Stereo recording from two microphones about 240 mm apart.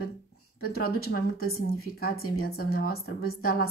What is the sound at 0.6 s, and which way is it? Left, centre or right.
Speech, left.